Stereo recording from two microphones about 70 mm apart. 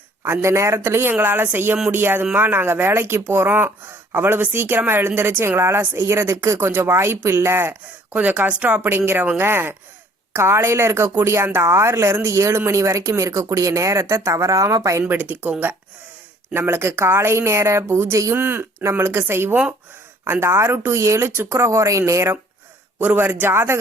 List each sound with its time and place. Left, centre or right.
0.4 s speech: right
8.1 s speech: right
15.0 s speech: right
16.6 s speech: right
18.3 s speech: right
23.0 s speech: right